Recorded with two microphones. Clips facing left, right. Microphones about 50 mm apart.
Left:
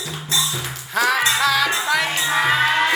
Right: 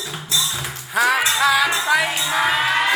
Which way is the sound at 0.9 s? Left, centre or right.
Centre.